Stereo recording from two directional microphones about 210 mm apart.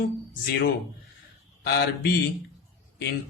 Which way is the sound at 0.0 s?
50° left (ahead or behind).